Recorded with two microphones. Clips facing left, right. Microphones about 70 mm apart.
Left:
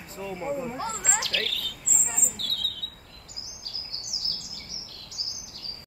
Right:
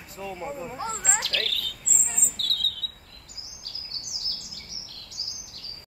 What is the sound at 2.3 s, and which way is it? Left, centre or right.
Bird, centre.